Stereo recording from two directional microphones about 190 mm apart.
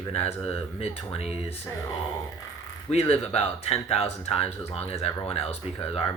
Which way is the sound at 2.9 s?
30° left (ahead or behind).